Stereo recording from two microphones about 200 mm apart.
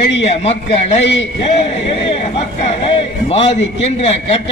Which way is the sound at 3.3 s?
30° left (ahead or behind).